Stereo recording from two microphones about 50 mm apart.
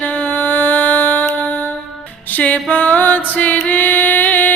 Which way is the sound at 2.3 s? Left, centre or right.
Left.